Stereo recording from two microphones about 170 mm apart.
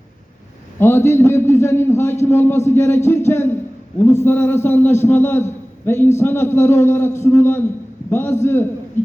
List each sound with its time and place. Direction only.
0.8 s a man's voice: 15° left (ahead or behind)